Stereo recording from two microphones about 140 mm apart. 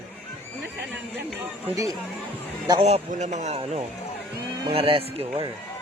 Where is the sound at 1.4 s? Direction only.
15° right (ahead or behind).